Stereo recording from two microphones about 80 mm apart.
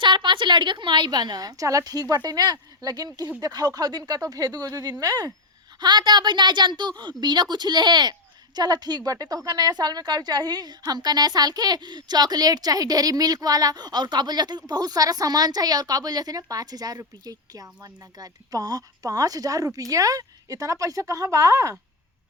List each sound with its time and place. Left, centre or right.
0.0 s a woman's voice: right
5.8 s a woman's voice: right